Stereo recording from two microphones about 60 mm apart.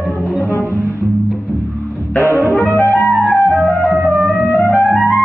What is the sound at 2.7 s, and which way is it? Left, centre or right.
Clarinet, left.